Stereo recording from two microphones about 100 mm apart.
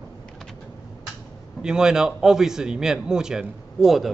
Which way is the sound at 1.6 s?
5° right (ahead or behind).